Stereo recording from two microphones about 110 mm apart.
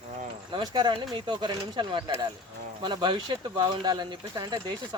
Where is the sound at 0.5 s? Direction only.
45° right (ahead or behind).